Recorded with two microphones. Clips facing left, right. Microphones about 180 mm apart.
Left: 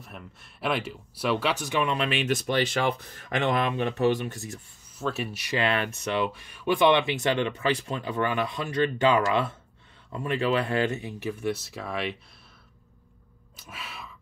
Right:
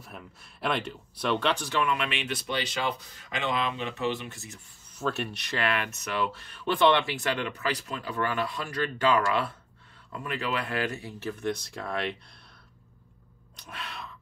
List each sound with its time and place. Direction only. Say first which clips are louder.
0.0 s speech: left 1 dB; centre (ahead or behind)
1.9 s speech: left 4 dB; 35° left (ahead or behind)
4.9 s speech: even; centre (ahead or behind)
5.6 s speech: left 3 dB; 25° left (ahead or behind); by 12.2 s centre (ahead or behind)
13.6 s a sound: right 1 dB; 5° left (ahead or behind)